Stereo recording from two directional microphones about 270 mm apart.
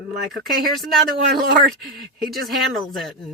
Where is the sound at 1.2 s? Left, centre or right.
Right.